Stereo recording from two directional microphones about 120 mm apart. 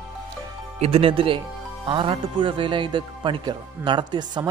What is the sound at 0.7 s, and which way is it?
A man's voice, 55° right (ahead or behind).